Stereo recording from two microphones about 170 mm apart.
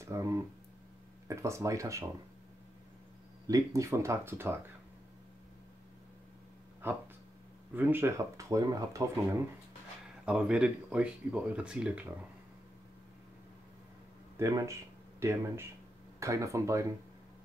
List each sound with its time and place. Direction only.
0.0 s speech: 15° right (ahead or behind)
3.4 s speech: 20° right (ahead or behind)
6.8 s speech: 10° right (ahead or behind)
10.2 s speech: 5° right (ahead or behind)
14.3 s speech: 15° right (ahead or behind)